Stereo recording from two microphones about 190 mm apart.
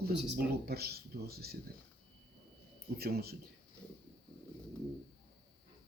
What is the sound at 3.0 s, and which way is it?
Speech, 55° right (ahead or behind).